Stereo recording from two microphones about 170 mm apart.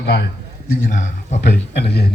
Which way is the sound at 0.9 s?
50° left (ahead or behind).